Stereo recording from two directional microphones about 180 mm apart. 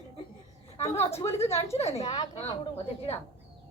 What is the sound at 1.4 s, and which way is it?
A woman's voice, 15° left (ahead or behind).